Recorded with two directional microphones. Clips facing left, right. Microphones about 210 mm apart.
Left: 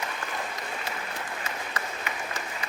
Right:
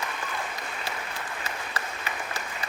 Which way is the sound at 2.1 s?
35° right (ahead or behind).